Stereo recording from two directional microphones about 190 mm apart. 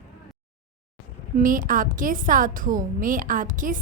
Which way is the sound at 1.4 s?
45° right (ahead or behind).